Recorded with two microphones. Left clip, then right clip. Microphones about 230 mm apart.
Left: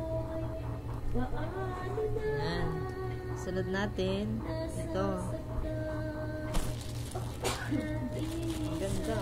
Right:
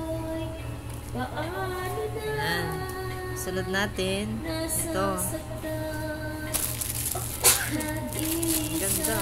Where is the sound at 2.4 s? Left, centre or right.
Right.